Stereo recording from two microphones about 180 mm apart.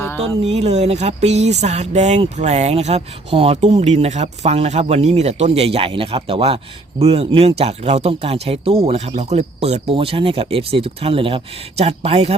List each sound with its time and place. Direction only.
0.2 s speech: 35° right (ahead or behind)